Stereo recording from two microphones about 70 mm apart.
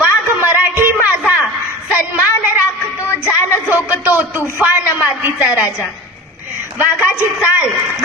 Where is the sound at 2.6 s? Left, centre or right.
Left.